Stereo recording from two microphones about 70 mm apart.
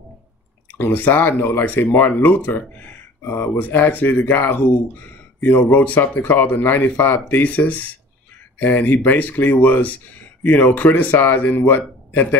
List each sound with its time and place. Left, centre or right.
0.7 s speech: left